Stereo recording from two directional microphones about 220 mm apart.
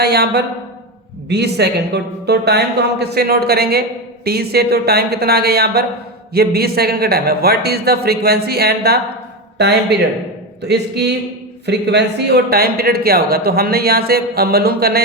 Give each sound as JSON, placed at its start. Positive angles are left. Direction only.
{"t": 0.0, "sound": "a man's voice", "side_deg": -45}